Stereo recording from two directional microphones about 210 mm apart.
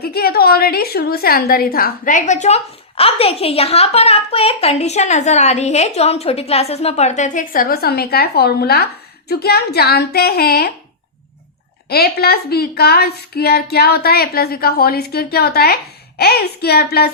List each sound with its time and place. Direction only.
0.0 s a woman's voice: 45° left (ahead or behind)
11.9 s a woman's voice: 50° left (ahead or behind)